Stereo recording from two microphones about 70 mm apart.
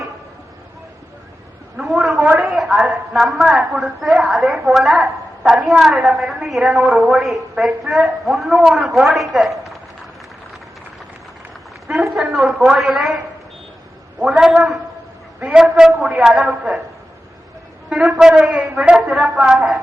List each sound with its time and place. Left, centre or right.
1.7 s a sound: centre
2.6 s a woman's voice: centre
6.7 s a woman's voice: centre
7.0 s a woman's voice: centre
11.9 s a woman's voice: centre
14.2 s a woman's voice: centre
17.8 s a sound: centre
18.2 s a woman's voice: centre